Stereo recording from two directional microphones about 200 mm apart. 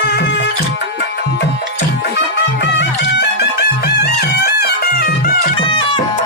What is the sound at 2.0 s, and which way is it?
Music, 60° left (ahead or behind).